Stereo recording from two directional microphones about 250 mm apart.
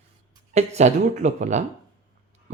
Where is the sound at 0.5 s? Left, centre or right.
Right.